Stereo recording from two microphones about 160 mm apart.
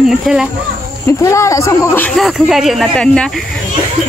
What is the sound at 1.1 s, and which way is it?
A man's voice, 20° left (ahead or behind).